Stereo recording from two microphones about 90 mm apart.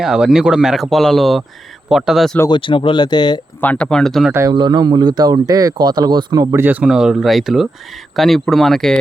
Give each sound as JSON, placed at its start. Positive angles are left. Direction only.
{"t": 0.0, "sound": "speech", "side_deg": -5}
{"t": 2.5, "sound": "speech", "side_deg": 65}
{"t": 3.6, "sound": "speech", "side_deg": 15}
{"t": 4.3, "sound": "speech", "side_deg": -30}
{"t": 4.5, "sound": "speech", "side_deg": -50}
{"t": 5.7, "sound": "speech", "side_deg": -55}
{"t": 6.5, "sound": "speech", "side_deg": -20}